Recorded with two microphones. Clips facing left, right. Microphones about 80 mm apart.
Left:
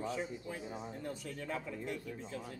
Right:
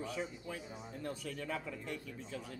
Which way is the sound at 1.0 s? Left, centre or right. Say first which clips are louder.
Right 4 dB; centre.